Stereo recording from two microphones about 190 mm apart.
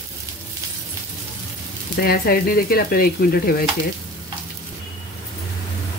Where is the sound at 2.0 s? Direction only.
50° left (ahead or behind).